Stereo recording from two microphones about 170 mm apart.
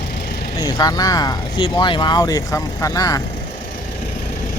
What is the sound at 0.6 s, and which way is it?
Speech, 25° left (ahead or behind).